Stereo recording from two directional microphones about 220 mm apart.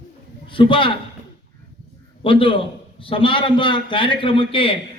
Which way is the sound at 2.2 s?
25° left (ahead or behind).